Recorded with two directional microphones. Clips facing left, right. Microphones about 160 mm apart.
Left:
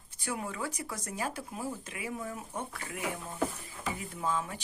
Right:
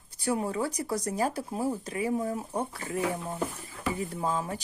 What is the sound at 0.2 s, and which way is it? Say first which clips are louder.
Speech: right 8 dB; 35° right (ahead or behind).